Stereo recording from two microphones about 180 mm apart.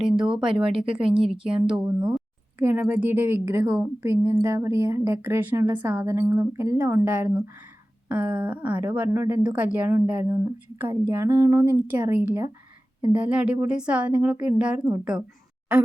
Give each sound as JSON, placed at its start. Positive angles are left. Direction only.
{"t": 0.3, "sound": "speech", "side_deg": -5}
{"t": 1.3, "sound": "speech", "side_deg": -30}
{"t": 1.8, "sound": "a woman's voice", "side_deg": -5}